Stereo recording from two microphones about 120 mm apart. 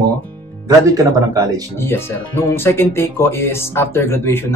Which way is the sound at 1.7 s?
20° left (ahead or behind).